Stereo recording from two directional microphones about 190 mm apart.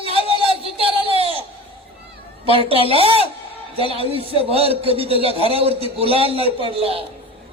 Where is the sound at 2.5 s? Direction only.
30° right (ahead or behind).